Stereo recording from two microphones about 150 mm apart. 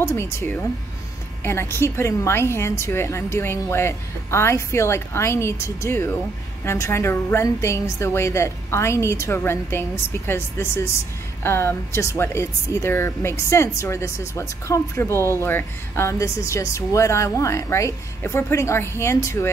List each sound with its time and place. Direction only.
0.0 s a woman's voice: 20° left (ahead or behind)